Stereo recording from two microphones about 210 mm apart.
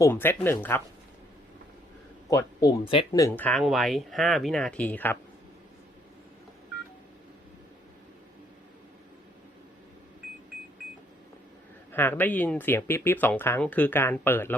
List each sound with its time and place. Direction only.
0.0 s speech: 10° left (ahead or behind)
2.3 s speech: 20° left (ahead or behind)
3.1 s speech: 15° left (ahead or behind)
11.9 s speech: 10° left (ahead or behind)